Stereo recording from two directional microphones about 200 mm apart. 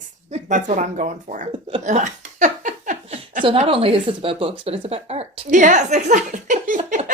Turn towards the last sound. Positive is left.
turn(degrees=-40)  # may be behind; listen again after turning